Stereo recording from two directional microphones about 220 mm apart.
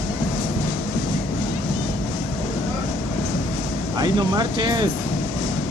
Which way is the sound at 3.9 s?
20° right (ahead or behind).